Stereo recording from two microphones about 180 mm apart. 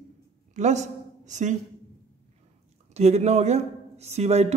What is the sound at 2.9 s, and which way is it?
Speech, 35° right (ahead or behind).